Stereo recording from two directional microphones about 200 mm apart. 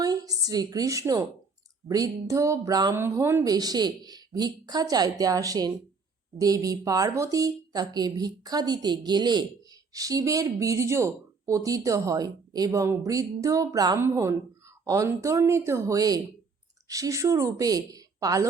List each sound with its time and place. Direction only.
0.0 s a woman's voice: 15° right (ahead or behind)